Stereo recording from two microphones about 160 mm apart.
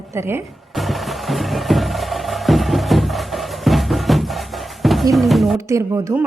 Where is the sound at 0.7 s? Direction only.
Centre (ahead or behind).